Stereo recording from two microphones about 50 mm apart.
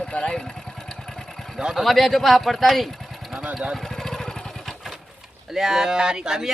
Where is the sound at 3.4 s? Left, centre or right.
Right.